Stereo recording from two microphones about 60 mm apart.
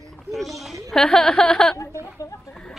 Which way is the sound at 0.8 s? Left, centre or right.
Centre.